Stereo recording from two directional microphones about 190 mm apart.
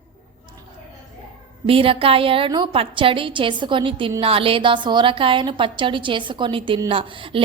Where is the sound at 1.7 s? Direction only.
30° right (ahead or behind).